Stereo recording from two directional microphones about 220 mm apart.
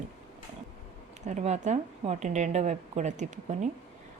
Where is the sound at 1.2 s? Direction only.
30° right (ahead or behind).